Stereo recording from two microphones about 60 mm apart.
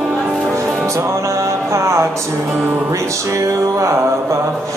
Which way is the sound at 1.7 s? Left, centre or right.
Right.